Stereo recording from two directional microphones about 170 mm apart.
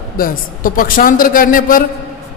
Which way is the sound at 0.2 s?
55° left (ahead or behind).